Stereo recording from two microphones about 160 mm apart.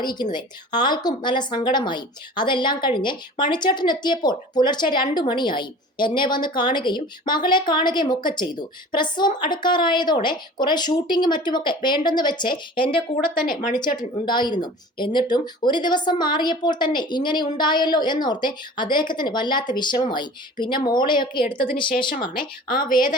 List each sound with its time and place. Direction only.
0.0 s a woman's voice: 25° left (ahead or behind)
14.3 s a woman's voice: 30° left (ahead or behind)
21.8 s speech: 65° left (ahead or behind)